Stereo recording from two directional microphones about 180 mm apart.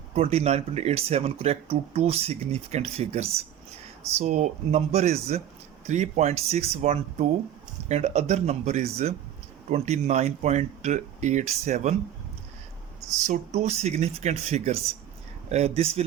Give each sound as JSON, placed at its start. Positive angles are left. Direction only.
{"t": 0.1, "sound": "speech", "side_deg": -35}
{"t": 13.2, "sound": "speech", "side_deg": -40}